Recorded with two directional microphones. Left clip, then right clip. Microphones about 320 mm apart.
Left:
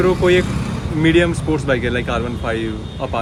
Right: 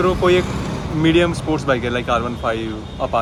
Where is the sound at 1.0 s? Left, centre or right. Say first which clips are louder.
Left 1 dB; centre.